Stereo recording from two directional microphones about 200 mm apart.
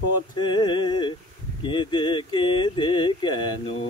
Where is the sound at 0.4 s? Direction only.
25° left (ahead or behind).